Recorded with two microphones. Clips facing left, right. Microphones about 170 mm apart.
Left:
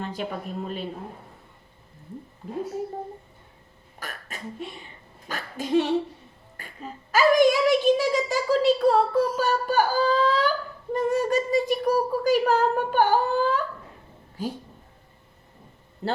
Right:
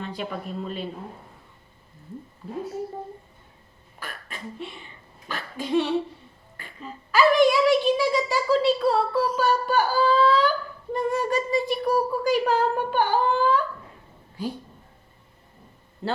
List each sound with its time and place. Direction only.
0.0 s speech: 45° left (ahead or behind)
4.0 s a sound: 45° left (ahead or behind)
5.3 s a child's voice: 45° left (ahead or behind)